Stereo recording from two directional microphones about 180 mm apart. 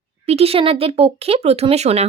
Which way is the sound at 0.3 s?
35° right (ahead or behind).